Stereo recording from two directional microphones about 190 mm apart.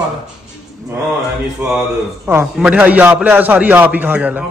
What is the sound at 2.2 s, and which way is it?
A man's voice, 10° right (ahead or behind).